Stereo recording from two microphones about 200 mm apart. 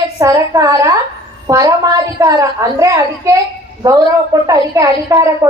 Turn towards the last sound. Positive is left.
turn(degrees=-15)  # may be behind; listen again after turning